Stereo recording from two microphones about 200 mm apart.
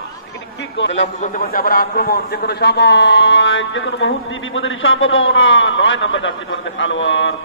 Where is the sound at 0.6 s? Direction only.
65° left (ahead or behind).